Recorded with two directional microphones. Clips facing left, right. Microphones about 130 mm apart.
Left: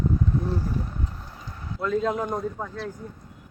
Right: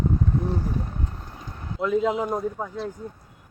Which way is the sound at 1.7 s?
10° right (ahead or behind).